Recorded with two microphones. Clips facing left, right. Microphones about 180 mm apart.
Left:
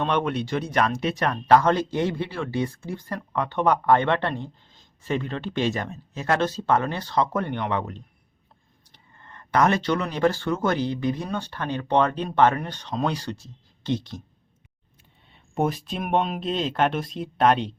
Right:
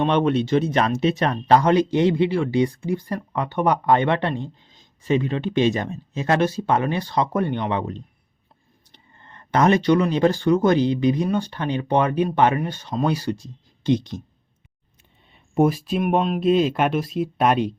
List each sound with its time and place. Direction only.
0.0 s a man's voice: 25° right (ahead or behind)
15.3 s a man's voice: 10° right (ahead or behind)